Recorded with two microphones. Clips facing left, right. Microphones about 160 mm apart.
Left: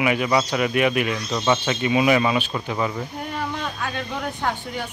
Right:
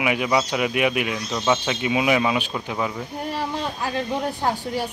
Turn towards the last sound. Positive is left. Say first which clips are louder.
# right 3 dB
turn(degrees=-35)  # may be behind; listen again after turning